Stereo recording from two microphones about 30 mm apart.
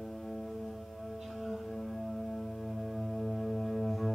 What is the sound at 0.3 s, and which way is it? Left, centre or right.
Music, centre.